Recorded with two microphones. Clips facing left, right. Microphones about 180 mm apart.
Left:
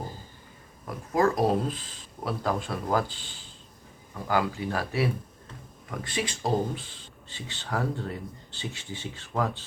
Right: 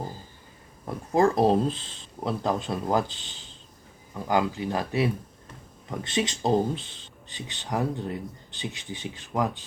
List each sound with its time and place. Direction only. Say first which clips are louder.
0.9 s speech: right 2 dB; 25° right (ahead or behind)
4.3 s speech: right 2 dB; 20° right (ahead or behind)